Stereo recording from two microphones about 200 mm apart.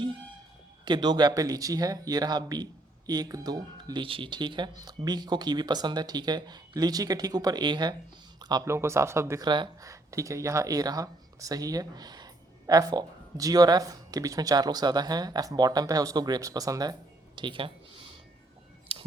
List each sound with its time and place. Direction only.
0.9 s speech: 20° right (ahead or behind)
17.3 s a sound: 25° right (ahead or behind)
18.9 s scissors: 30° right (ahead or behind)